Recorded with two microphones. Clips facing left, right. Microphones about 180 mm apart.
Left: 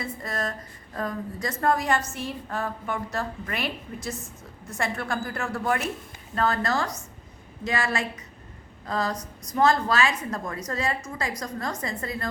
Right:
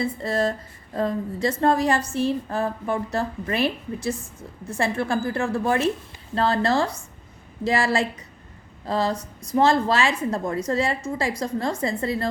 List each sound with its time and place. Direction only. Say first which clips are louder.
0.0 s a woman's voice: right 8 dB; 30° right (ahead or behind)